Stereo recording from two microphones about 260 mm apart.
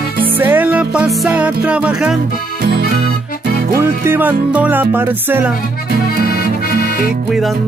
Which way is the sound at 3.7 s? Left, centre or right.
Centre.